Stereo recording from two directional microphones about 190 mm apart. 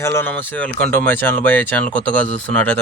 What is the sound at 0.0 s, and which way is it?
Speech, 10° left (ahead or behind).